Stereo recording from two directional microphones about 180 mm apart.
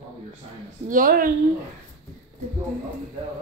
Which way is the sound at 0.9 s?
50° right (ahead or behind).